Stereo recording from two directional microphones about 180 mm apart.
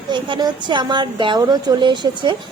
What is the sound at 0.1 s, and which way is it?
A woman's voice, 25° right (ahead or behind).